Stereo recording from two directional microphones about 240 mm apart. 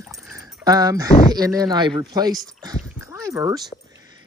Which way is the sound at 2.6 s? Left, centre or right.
Centre.